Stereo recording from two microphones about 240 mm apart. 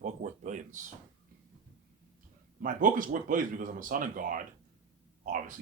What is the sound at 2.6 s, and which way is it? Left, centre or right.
Speech, right.